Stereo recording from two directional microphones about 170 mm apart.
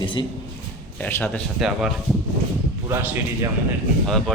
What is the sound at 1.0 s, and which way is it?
Speech, 10° left (ahead or behind).